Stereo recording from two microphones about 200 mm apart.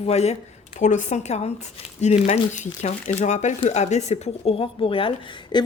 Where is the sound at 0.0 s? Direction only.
30° left (ahead or behind).